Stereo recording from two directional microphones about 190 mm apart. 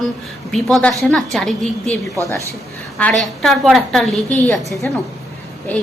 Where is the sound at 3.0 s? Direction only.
5° left (ahead or behind).